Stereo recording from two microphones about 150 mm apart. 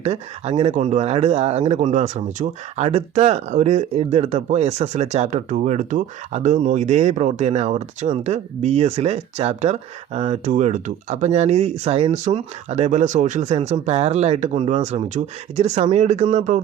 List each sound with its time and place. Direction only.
0.0 s speech: 45° right (ahead or behind)